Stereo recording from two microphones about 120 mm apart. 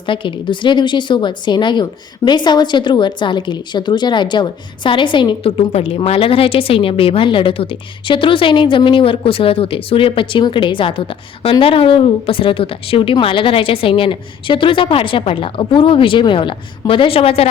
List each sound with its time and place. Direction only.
0.0 s a woman's voice: 45° left (ahead or behind)